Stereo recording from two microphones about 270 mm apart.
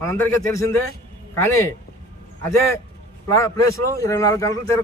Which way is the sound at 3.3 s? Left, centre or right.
Centre.